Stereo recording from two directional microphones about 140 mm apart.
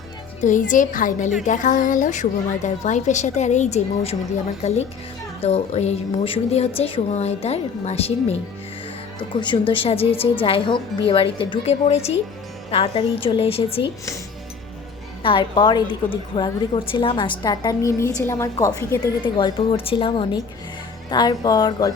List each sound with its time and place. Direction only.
0.4 s a woman's voice: 70° left (ahead or behind); by 8.4 s 50° left (ahead or behind)
9.3 s a woman's voice: 35° left (ahead or behind)
15.2 s a woman's voice: 40° left (ahead or behind); by 18.9 s 20° left (ahead or behind)
19.2 s a woman's voice: 35° left (ahead or behind)